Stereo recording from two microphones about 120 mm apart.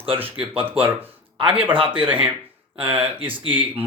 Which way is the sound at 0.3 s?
50° right (ahead or behind).